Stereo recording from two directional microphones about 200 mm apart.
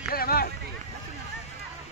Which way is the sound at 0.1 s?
50° left (ahead or behind).